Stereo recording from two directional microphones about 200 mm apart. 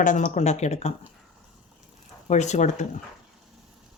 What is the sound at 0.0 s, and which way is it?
Speech, 35° left (ahead or behind).